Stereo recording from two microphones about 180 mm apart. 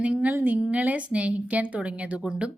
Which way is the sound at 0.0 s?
5° right (ahead or behind).